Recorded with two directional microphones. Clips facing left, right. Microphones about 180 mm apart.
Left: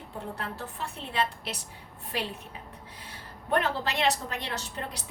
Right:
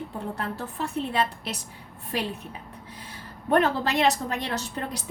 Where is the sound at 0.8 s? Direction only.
45° right (ahead or behind).